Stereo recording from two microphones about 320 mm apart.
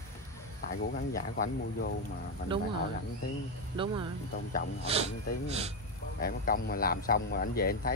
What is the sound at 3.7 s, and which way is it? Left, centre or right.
Speech, centre.